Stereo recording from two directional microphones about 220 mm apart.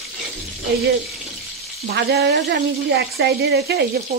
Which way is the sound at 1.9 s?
45° right (ahead or behind).